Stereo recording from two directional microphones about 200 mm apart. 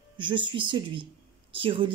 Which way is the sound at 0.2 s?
25° right (ahead or behind).